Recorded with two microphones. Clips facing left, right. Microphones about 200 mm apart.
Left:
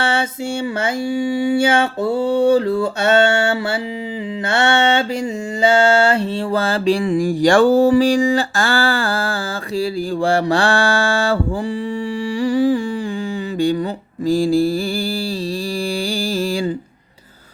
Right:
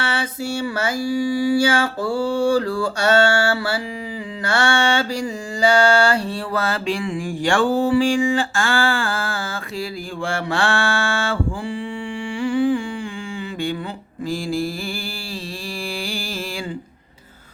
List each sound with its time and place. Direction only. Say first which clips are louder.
0.0 s mantra: left 5 dB; 25° left (ahead or behind)
12.4 s humming: left 3 dB; 40° left (ahead or behind)
14.3 s mantra: left 9 dB; 35° left (ahead or behind)